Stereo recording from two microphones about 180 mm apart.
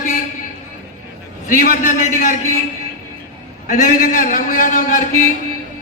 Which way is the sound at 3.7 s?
45° left (ahead or behind).